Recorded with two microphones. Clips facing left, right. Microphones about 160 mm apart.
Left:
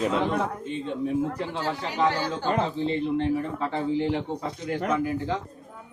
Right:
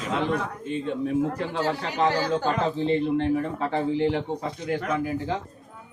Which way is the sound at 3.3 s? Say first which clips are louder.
Right 2 dB; 45° right (ahead or behind).